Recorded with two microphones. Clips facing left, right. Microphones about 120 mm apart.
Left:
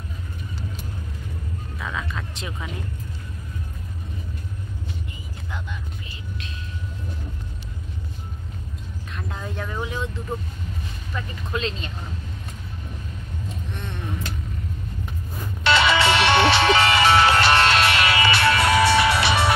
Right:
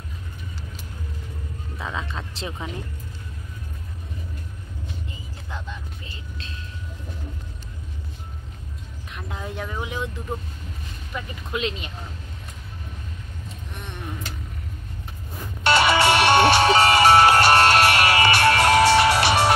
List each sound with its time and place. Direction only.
1.8 s music: 25° right (ahead or behind)
9.1 s vehicle: 15° right (ahead or behind)
11.1 s speech: 15° right (ahead or behind)
15.6 s music: 50° right (ahead or behind)